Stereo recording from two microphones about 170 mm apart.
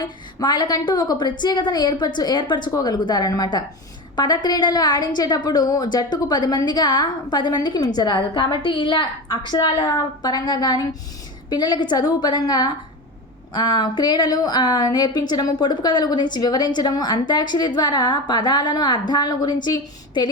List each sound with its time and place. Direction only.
0.3 s a woman's voice: 25° left (ahead or behind)